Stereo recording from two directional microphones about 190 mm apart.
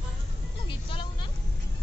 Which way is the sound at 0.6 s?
25° left (ahead or behind).